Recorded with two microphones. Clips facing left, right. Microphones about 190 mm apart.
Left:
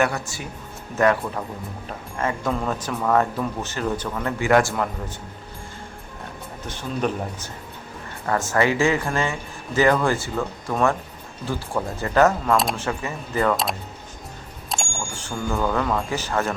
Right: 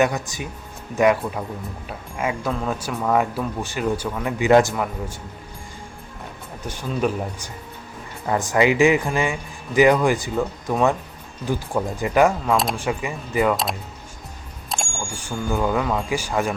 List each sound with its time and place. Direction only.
0.0 s speech: 20° right (ahead or behind)
4.7 s a man's voice: 5° right (ahead or behind)
6.7 s speech: 10° right (ahead or behind)
12.5 s a man's voice: centre (ahead or behind)
12.7 s speech: 15° right (ahead or behind)
14.7 s speech: 5° right (ahead or behind)